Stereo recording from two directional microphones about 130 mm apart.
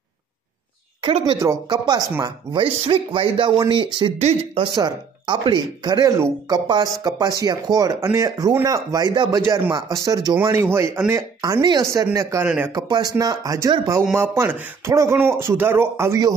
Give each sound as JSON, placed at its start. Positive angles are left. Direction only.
{"t": 1.0, "sound": "speech", "side_deg": -40}
{"t": 1.7, "sound": "speech", "side_deg": -30}
{"t": 2.5, "sound": "speech", "side_deg": -45}
{"t": 4.7, "sound": "speech", "side_deg": -35}
{"t": 12.4, "sound": "speech", "side_deg": -10}
{"t": 12.7, "sound": "speech", "side_deg": -30}